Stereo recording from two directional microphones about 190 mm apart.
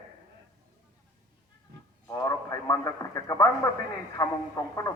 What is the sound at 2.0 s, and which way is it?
A man's voice, 15° left (ahead or behind).